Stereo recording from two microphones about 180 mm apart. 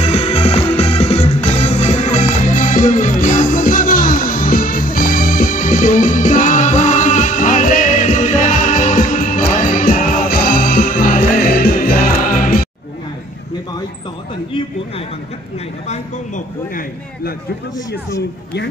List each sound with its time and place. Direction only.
0.0 s music: 35° left (ahead or behind); by 12.6 s 50° left (ahead or behind)
15.9 s a man's voice: 45° left (ahead or behind)